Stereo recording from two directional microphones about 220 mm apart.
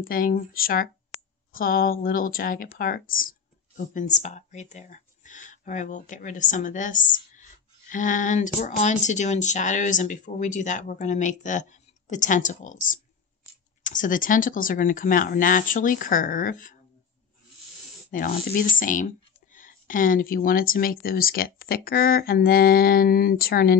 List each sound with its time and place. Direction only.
0.0 s speech: 40° left (ahead or behind)
18.1 s speech: 40° left (ahead or behind)